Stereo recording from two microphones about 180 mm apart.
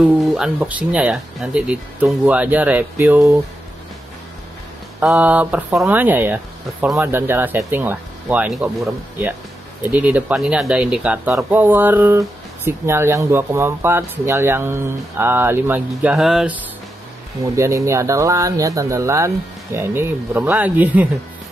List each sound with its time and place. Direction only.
0.0 s speech: centre (ahead or behind)
5.0 s speech: 5° right (ahead or behind)
17.6 s speech: 15° right (ahead or behind)